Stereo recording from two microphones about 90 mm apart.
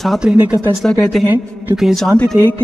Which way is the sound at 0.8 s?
Centre (ahead or behind).